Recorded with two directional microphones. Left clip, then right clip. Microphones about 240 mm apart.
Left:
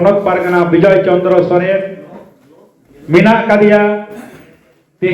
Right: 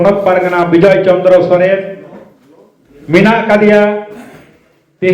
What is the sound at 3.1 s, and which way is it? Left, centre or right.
Speech, right.